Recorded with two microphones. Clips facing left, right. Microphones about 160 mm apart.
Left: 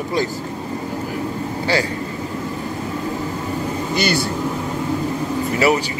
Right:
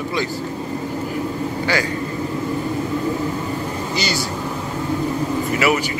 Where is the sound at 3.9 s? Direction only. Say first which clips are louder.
Left 5 dB; 55° left (ahead or behind).